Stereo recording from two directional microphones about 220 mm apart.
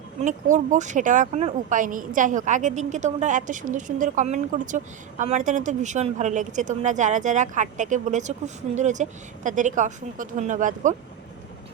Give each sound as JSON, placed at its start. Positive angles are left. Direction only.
{"t": 0.2, "sound": "speech", "side_deg": -35}